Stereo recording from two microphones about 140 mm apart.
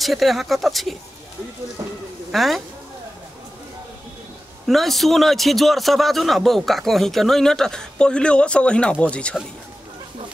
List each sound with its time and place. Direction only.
0.0 s a man's voice: centre (ahead or behind)
1.8 s speech: 20° right (ahead or behind)
2.3 s a man's voice: centre (ahead or behind)
4.6 s a man's voice: centre (ahead or behind)